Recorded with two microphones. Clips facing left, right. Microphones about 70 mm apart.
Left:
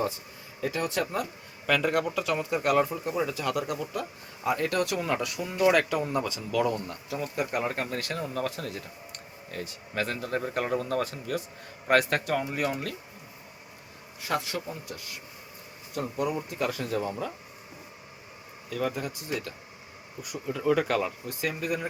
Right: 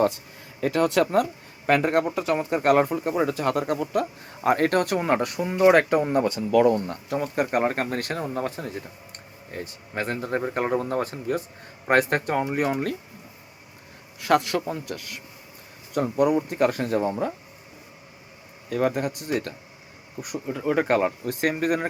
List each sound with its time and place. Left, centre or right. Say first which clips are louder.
0.6 s a man's voice: right 8 dB; right
1.6 s speech: right 5 dB; right
14.2 s a man's voice: right 9 dB; right
16.0 s speech: right 9 dB; right
18.7 s speech: right 7 dB; right
20.2 s speech: right 3 dB; right
20.8 s speech: right 6 dB; right